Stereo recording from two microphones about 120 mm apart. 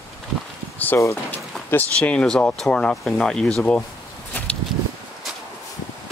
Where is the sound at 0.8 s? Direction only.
20° left (ahead or behind).